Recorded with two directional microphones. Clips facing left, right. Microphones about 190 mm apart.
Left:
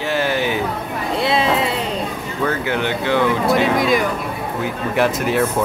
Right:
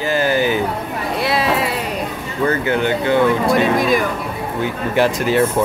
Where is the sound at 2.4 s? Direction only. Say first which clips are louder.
Right 4 dB; centre (ahead or behind).